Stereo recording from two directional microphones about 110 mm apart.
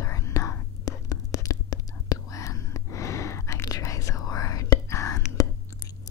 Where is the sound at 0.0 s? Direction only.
25° left (ahead or behind).